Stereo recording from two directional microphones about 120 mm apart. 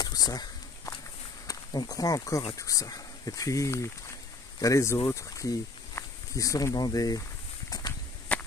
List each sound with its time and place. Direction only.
0.0 s a sound: 30° left (ahead or behind)
1.5 s speech: 35° left (ahead or behind)
8.3 s whip: 10° left (ahead or behind)